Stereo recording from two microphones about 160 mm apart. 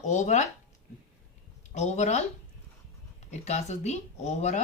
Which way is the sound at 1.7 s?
45° left (ahead or behind).